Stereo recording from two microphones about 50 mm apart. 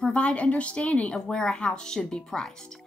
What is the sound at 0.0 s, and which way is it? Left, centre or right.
Speech, left.